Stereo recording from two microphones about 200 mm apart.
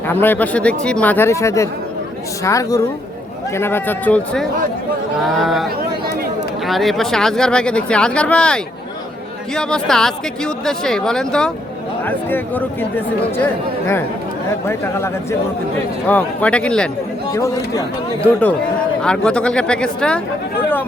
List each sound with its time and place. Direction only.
0.1 s a woman's voice: 10° left (ahead or behind)
6.7 s a woman's voice: centre (ahead or behind)
17.3 s speech: 15° left (ahead or behind)
19.0 s a woman's voice: 5° left (ahead or behind)